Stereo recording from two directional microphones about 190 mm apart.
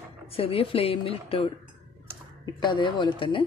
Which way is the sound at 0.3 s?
30° left (ahead or behind).